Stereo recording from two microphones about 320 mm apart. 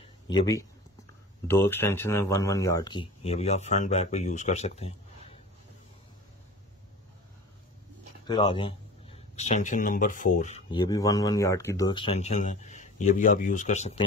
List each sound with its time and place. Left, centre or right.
0.0 s a sound: centre
1.5 s speech: centre
8.3 s speech: centre